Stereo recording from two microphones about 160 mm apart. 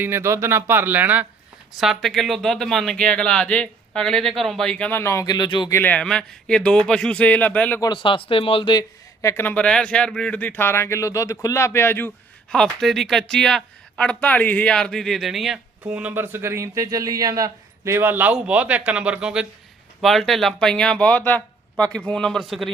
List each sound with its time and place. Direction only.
0.0 s speech: 15° right (ahead or behind); by 5.7 s 25° left (ahead or behind)
5.7 s speech: 10° left (ahead or behind)
7.8 s speech: 30° left (ahead or behind)
9.2 s a man's voice: 15° left (ahead or behind)